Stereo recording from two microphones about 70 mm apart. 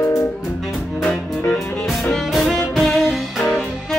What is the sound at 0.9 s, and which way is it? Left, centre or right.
Music, centre.